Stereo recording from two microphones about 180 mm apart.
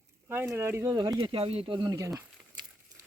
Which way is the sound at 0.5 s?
15° right (ahead or behind).